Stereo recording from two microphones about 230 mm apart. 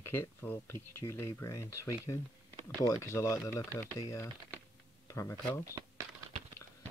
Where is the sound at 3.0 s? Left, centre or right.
Centre.